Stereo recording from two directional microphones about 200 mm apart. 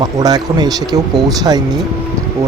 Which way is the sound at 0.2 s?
20° right (ahead or behind).